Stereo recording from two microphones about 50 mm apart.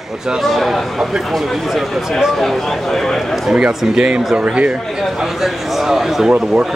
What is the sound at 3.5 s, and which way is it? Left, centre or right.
Speech, centre.